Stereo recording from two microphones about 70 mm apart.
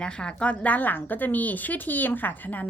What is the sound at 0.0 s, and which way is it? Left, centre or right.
A woman's voice, centre.